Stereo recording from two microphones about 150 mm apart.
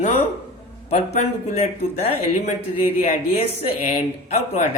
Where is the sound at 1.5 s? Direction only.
45° left (ahead or behind).